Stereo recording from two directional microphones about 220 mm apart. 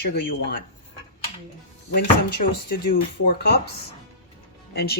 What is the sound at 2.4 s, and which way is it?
Speech, 40° left (ahead or behind).